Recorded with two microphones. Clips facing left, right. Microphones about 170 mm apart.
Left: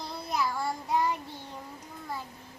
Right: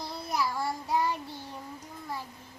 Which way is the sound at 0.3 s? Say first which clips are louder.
Even; 5° right (ahead or behind).